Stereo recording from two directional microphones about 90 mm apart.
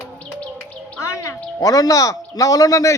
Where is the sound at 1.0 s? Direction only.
35° left (ahead or behind).